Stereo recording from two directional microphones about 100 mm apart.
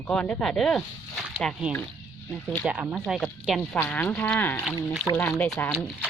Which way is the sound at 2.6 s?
15° right (ahead or behind).